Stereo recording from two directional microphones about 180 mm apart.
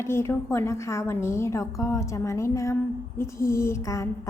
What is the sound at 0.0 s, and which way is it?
A woman's voice, 15° left (ahead or behind).